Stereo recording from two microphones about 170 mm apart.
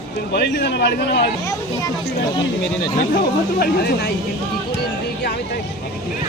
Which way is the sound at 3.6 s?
65° left (ahead or behind).